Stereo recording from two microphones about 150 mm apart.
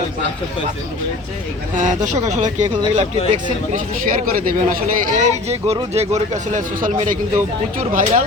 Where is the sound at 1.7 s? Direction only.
55° right (ahead or behind).